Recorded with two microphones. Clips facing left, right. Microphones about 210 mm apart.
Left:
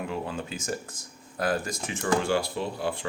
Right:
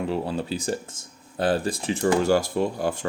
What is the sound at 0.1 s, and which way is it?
Speech, 35° right (ahead or behind).